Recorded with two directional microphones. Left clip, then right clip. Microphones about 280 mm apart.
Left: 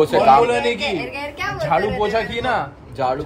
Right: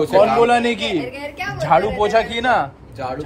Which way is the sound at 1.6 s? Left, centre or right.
Right.